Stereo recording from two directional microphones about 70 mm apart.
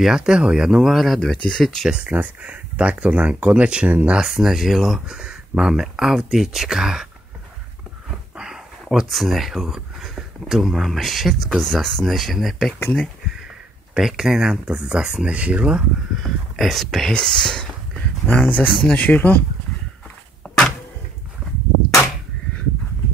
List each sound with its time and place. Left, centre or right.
0.0 s speech: centre
2.0 s speech: centre
4.2 s speech: centre
8.4 s speech: centre
13.9 s speech: centre
16.2 s speech: centre
18.2 s speech: left
20.4 s cupboard open or close: centre